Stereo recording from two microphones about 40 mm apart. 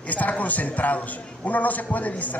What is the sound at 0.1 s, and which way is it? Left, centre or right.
A man's voice, left.